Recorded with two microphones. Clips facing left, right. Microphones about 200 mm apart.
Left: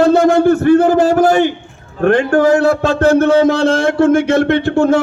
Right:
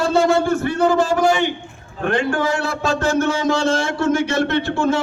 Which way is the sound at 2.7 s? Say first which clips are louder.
Left 8 dB; 60° left (ahead or behind).